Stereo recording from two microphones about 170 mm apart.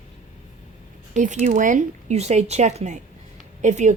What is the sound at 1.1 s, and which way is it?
A woman's voice, 45° right (ahead or behind).